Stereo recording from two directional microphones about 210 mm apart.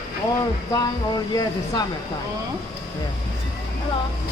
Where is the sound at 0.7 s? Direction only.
20° left (ahead or behind).